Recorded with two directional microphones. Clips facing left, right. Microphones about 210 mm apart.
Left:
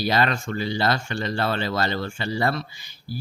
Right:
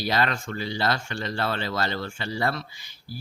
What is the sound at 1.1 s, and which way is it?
Speech, 40° left (ahead or behind).